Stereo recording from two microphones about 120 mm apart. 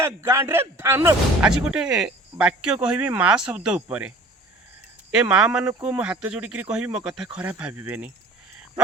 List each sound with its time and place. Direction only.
0.0 s speech: 20° right (ahead or behind)
1.5 s speech: 5° right (ahead or behind)
5.1 s speech: 5° right (ahead or behind)